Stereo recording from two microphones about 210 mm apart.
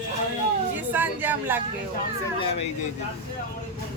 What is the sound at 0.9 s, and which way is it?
Speech, 10° right (ahead or behind).